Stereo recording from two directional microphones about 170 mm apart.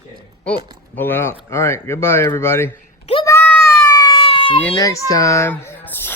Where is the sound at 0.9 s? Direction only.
10° left (ahead or behind).